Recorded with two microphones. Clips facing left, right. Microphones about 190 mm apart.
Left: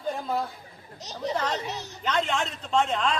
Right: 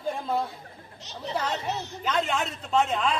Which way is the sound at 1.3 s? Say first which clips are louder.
Right 3 dB; 10° right (ahead or behind).